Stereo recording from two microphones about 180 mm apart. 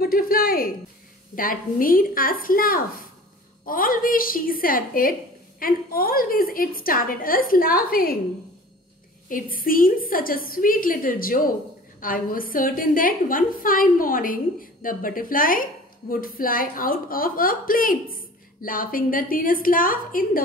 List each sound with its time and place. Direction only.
0.0 s a woman's voice: 55° left (ahead or behind)
9.3 s a woman's voice: 50° left (ahead or behind)